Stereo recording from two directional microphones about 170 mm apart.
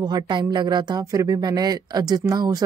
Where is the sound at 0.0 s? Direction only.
25° right (ahead or behind).